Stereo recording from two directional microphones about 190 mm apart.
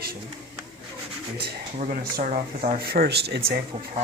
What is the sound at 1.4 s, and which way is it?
Speech, 35° right (ahead or behind).